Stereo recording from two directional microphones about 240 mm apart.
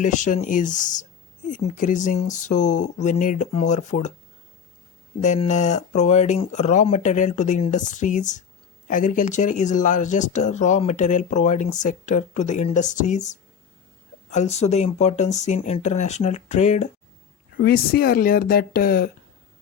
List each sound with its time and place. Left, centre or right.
0.0 s speech: left
5.2 s speech: left